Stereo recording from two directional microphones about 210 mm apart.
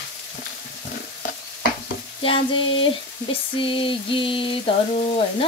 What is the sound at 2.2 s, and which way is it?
Frying, 25° left (ahead or behind).